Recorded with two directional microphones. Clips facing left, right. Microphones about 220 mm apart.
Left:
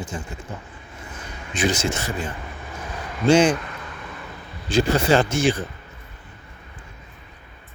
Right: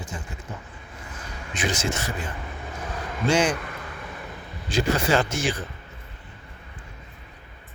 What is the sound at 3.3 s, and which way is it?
Speech, 25° left (ahead or behind).